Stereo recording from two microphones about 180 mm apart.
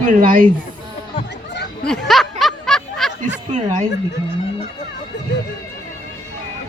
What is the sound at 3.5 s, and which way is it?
Speech, 40° right (ahead or behind).